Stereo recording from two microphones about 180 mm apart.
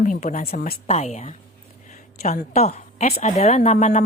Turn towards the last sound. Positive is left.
turn(degrees=40)  # may be behind; listen again after turning